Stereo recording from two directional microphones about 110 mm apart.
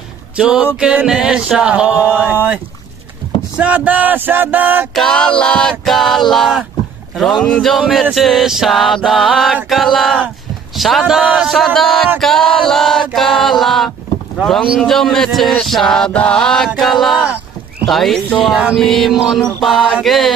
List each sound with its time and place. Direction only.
0.4 s a sound: 10° right (ahead or behind)
4.9 s mantra: 5° left (ahead or behind)
7.4 s speech: 10° left (ahead or behind)
7.7 s mantra: 5° left (ahead or behind)
12.2 s chant: 5° left (ahead or behind)
14.4 s mantra: centre (ahead or behind)